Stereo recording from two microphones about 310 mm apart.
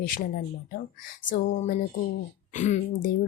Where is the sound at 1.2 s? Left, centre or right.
Left.